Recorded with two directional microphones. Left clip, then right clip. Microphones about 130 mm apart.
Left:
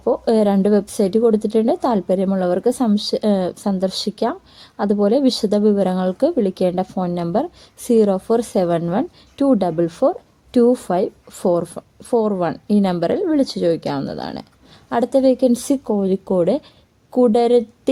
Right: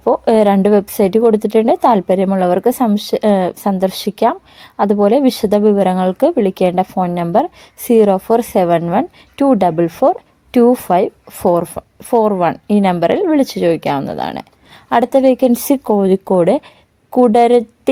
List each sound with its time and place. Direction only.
0.0 s speech: 15° right (ahead or behind)